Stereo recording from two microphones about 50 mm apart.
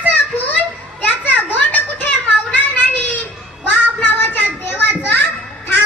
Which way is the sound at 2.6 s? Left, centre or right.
Left.